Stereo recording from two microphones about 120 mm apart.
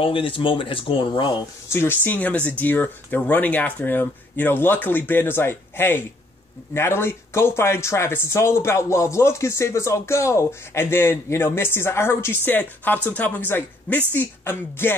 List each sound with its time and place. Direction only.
0.0 s speech: 45° left (ahead or behind)
1.7 s speech: 20° left (ahead or behind)